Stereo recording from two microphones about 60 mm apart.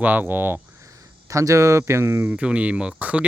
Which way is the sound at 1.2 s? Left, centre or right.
Right.